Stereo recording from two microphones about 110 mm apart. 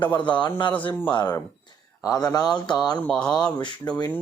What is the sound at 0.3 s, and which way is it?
Speech, 45° left (ahead or behind).